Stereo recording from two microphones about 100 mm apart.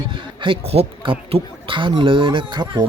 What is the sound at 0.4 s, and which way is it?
Speech, 70° right (ahead or behind).